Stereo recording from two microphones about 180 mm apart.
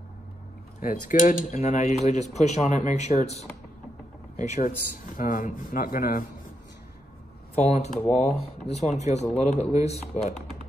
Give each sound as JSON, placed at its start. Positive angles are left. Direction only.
{"t": 0.7, "sound": "speech", "side_deg": 45}
{"t": 7.5, "sound": "speech", "side_deg": 40}